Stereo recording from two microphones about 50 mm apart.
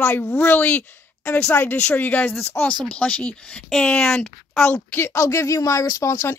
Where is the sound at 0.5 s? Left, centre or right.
Left.